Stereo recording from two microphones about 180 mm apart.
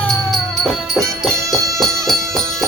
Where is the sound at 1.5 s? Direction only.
20° right (ahead or behind).